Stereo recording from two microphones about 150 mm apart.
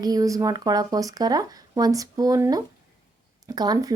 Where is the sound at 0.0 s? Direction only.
25° right (ahead or behind).